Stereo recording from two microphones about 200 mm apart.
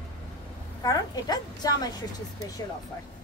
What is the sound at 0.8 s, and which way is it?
A woman's voice, 20° left (ahead or behind).